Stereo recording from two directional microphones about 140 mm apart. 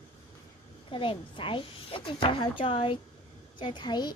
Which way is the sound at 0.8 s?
40° left (ahead or behind).